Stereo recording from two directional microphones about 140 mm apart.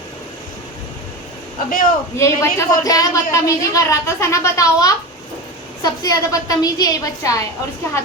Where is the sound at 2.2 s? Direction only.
20° left (ahead or behind).